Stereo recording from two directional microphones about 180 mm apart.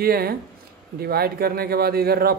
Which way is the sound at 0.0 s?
55° right (ahead or behind).